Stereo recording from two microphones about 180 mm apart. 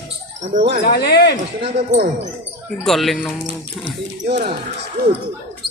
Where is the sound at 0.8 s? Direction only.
60° left (ahead or behind).